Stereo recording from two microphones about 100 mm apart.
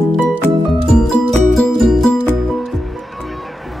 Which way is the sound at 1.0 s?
5° left (ahead or behind).